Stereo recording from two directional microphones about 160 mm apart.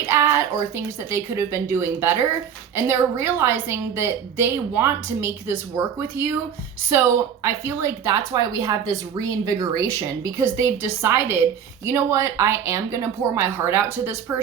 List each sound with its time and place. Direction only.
0.1 s a woman's voice: 15° right (ahead or behind)